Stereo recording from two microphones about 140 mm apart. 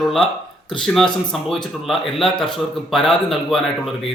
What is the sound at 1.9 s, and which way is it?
A man's voice, centre (ahead or behind).